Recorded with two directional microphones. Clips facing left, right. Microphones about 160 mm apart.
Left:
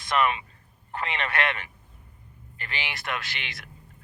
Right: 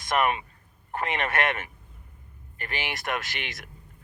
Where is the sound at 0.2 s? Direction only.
50° right (ahead or behind).